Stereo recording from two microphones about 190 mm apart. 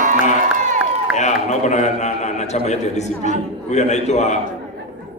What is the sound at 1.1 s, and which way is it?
A man's voice, 35° left (ahead or behind).